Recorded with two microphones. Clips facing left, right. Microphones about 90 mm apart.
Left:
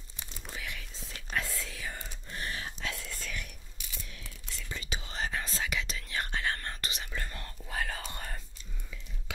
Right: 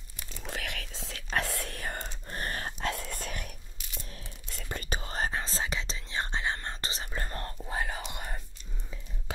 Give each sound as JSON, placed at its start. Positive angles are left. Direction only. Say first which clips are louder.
{"t": 0.5, "sound": "whispering", "louder": "right 5 dB", "side_deg": -70}
{"t": 2.2, "sound": "whispering", "louder": "right 2 dB", "side_deg": -45}
{"t": 7.6, "sound": "whispering", "louder": "even", "side_deg": -25}